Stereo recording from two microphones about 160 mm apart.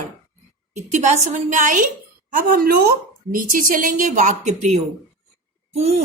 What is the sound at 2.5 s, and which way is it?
A woman's voice, 70° right (ahead or behind).